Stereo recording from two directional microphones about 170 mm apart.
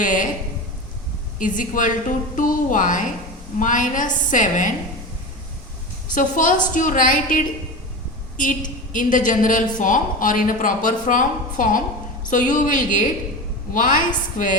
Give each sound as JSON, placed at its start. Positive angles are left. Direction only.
{"t": 0.0, "sound": "a sound", "side_deg": 50}
{"t": 1.4, "sound": "a woman's voice", "side_deg": 50}
{"t": 6.1, "sound": "a woman's voice", "side_deg": 50}
{"t": 8.9, "sound": "a woman's voice", "side_deg": 50}